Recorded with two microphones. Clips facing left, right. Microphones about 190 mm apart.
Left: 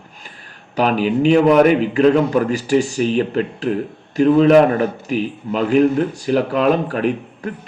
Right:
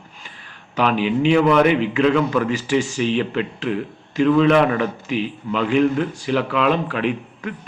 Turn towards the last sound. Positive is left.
turn(degrees=40)  # may be behind; listen again after turning